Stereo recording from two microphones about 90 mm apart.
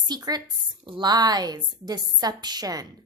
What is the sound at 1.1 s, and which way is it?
A woman's voice, 50° right (ahead or behind).